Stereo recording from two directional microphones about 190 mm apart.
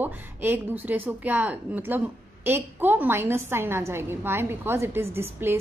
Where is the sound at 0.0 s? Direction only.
10° right (ahead or behind).